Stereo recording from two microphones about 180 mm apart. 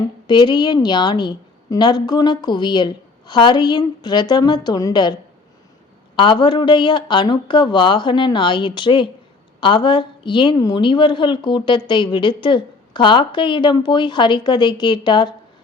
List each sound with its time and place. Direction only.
0.3 s a woman's voice: 25° left (ahead or behind)
6.1 s a woman's voice: 25° left (ahead or behind)